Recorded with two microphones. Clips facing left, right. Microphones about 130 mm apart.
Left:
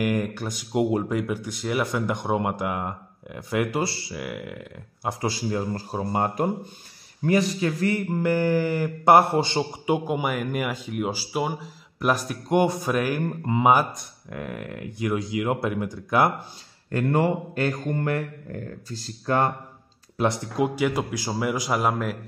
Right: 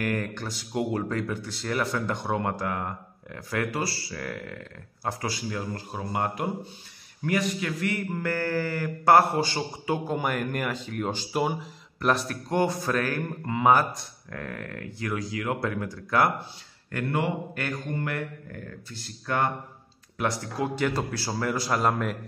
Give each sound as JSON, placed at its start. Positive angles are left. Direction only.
{"t": 0.0, "sound": "a man's voice", "side_deg": 15}
{"t": 5.2, "sound": "mantra", "side_deg": 25}
{"t": 7.2, "sound": "a man's voice", "side_deg": 30}
{"t": 8.2, "sound": "a man's voice", "side_deg": 15}
{"t": 17.1, "sound": "mantra", "side_deg": 35}
{"t": 20.2, "sound": "a man's voice", "side_deg": 20}